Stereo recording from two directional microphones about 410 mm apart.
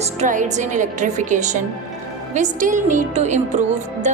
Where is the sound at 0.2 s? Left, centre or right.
Centre.